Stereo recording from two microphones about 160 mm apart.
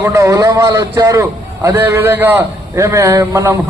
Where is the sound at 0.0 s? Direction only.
20° right (ahead or behind).